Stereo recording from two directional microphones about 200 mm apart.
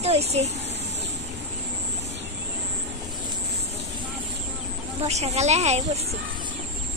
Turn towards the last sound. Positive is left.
turn(degrees=-30)  # may be behind; listen again after turning